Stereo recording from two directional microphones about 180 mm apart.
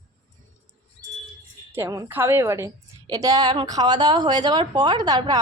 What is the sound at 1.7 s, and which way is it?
A woman's voice, 15° right (ahead or behind).